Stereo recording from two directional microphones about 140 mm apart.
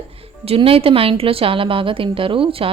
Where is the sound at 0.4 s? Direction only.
40° right (ahead or behind).